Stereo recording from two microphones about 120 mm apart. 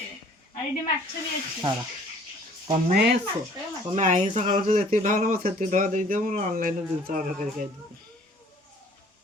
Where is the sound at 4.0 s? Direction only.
80° right.